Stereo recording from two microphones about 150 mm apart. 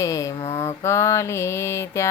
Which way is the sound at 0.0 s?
20° left (ahead or behind).